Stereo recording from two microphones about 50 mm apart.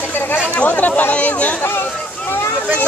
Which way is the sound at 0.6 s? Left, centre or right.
Left.